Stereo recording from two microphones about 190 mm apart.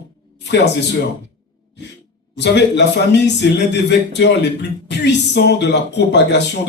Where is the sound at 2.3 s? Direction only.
65° left (ahead or behind).